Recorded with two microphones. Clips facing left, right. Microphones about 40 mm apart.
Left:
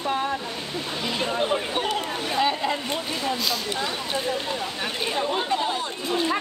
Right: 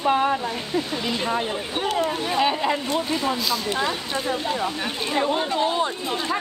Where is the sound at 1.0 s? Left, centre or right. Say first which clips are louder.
Even; centre.